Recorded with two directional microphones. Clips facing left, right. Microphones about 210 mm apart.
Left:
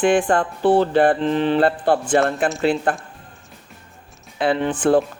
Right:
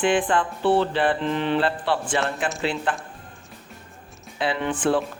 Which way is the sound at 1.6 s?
45° left (ahead or behind).